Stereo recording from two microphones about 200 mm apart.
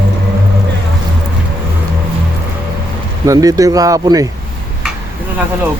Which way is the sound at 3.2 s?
20° right (ahead or behind).